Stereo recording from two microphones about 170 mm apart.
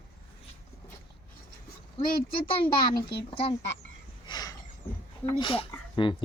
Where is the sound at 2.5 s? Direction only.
30° left (ahead or behind).